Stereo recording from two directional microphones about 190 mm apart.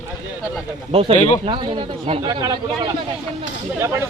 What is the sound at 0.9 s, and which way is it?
Speech, 30° right (ahead or behind).